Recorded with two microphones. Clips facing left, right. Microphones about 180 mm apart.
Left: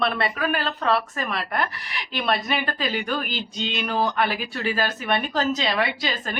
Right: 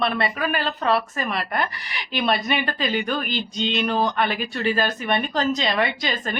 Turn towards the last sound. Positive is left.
turn(degrees=5)  # may be behind; listen again after turning